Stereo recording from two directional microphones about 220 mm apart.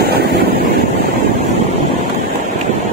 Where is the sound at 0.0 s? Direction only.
45° right (ahead or behind).